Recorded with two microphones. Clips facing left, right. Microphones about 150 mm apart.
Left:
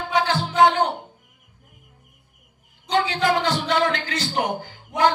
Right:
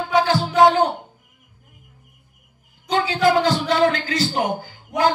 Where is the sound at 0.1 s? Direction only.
40° right (ahead or behind).